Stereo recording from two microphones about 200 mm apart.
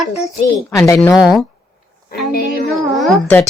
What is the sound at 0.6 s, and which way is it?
Speech, 15° left (ahead or behind).